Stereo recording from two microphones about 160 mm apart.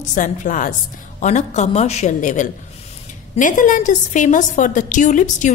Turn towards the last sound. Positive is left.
turn(degrees=50)  # may be behind; listen again after turning